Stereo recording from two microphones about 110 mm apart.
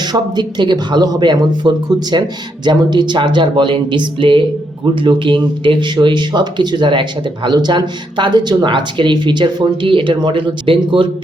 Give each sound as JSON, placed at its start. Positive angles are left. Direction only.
{"t": 0.0, "sound": "speech", "side_deg": -40}